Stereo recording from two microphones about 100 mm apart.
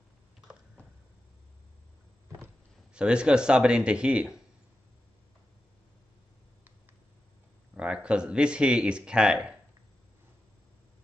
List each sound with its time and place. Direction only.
2.9 s speech: 10° right (ahead or behind)
7.7 s speech: 10° right (ahead or behind)